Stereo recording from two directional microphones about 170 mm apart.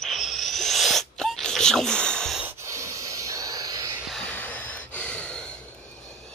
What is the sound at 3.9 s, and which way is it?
Gasp, centre (ahead or behind).